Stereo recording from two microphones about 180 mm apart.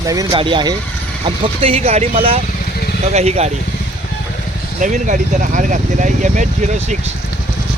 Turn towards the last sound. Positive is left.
turn(degrees=-40)  # may be behind; listen again after turning